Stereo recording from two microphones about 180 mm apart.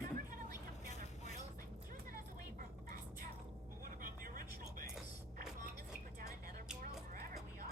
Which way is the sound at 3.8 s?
50° right (ahead or behind).